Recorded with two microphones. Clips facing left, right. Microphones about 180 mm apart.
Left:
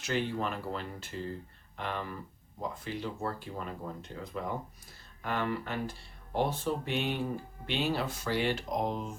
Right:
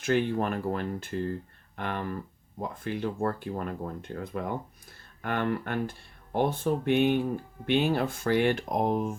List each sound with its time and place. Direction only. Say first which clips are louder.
0.0 s speech: right 6 dB; 55° right (ahead or behind)